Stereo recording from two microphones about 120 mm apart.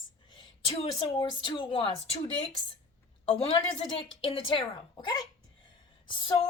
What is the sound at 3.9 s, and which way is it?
A woman's voice, 45° left (ahead or behind).